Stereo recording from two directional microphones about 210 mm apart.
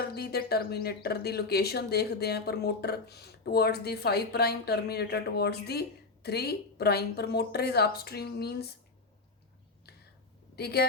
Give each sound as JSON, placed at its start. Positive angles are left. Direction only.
{"t": 0.0, "sound": "speech", "side_deg": 50}
{"t": 10.5, "sound": "speech", "side_deg": 50}